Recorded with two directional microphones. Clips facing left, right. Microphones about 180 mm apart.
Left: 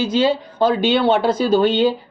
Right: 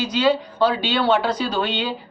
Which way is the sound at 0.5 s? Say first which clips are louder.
Left 4 dB; 50° left (ahead or behind).